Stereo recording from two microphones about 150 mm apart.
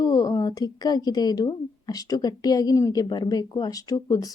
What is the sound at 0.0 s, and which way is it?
A woman's voice, 25° left (ahead or behind).